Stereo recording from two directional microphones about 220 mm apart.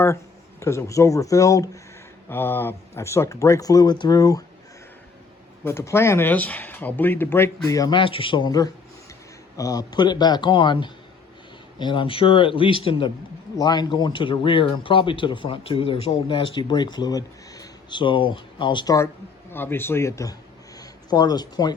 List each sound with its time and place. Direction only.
0.6 s speech: 15° left (ahead or behind)
5.6 s speech: 10° left (ahead or behind)
20.7 s a sound: 15° left (ahead or behind)